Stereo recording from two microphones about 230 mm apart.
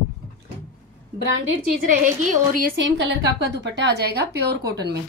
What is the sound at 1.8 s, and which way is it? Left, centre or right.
Speech, right.